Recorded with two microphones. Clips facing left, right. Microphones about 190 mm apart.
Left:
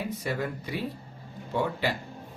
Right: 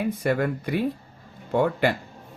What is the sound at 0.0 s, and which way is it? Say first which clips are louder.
Speech: right 7 dB; 55° right (ahead or behind).